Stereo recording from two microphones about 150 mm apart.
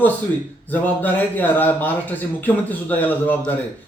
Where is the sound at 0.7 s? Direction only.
10° left (ahead or behind).